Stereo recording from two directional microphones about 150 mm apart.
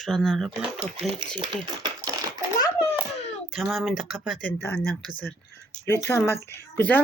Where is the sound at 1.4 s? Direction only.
30° right (ahead or behind).